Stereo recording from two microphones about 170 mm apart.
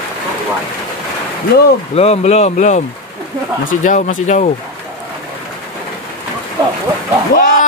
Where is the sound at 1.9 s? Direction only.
40° left (ahead or behind).